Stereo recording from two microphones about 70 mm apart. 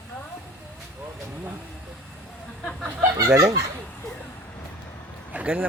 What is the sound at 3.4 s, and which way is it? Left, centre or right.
Speech, right.